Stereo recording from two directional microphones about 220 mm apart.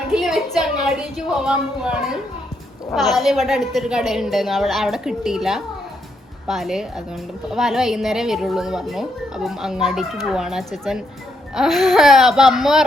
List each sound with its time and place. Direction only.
0.1 s speech: centre (ahead or behind)
3.2 s speech: centre (ahead or behind)